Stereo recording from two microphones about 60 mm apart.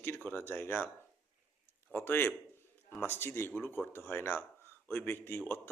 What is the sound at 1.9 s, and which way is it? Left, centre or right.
Speech, left.